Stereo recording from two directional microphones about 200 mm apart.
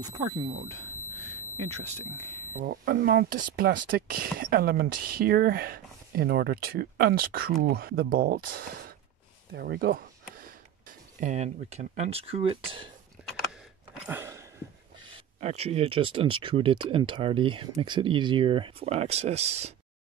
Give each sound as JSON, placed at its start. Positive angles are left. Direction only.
{"t": 2.6, "sound": "speech", "side_deg": -45}
{"t": 13.2, "sound": "a sound", "side_deg": -5}
{"t": 15.0, "sound": "speech", "side_deg": -30}